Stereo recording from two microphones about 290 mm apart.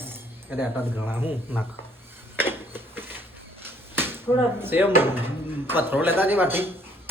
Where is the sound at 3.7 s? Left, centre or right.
Centre.